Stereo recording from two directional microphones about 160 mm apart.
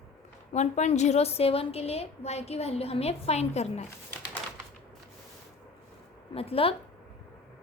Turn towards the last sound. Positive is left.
turn(degrees=35)  # may be behind; listen again after turning